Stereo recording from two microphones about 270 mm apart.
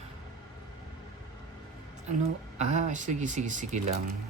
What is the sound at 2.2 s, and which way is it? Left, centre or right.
Speech, right.